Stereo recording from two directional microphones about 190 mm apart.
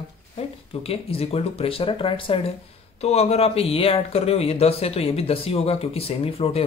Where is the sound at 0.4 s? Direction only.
30° left (ahead or behind).